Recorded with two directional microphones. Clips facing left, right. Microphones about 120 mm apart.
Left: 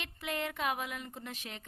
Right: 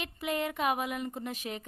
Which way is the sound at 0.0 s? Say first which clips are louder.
Right 5 dB; 5° right (ahead or behind).